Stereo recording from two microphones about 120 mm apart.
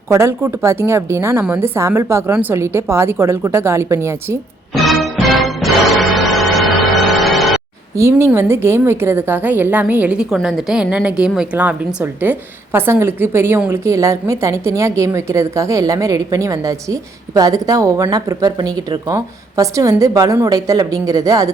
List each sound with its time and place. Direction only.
0.1 s a woman's voice: 20° right (ahead or behind)
4.7 s music: centre (ahead or behind)
8.2 s a woman's voice: 20° right (ahead or behind)